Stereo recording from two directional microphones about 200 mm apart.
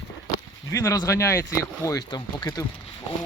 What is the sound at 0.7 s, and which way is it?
Speech, 15° left (ahead or behind).